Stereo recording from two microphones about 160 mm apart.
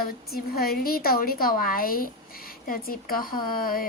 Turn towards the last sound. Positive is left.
turn(degrees=65)  # may be behind; listen again after turning